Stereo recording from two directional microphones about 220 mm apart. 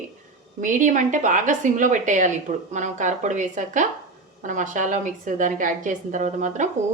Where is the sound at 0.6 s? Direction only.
35° right (ahead or behind).